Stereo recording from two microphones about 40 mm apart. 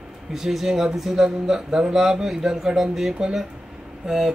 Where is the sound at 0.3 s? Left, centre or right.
Centre.